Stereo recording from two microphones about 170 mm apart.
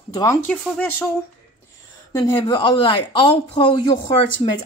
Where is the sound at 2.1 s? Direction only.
25° left (ahead or behind).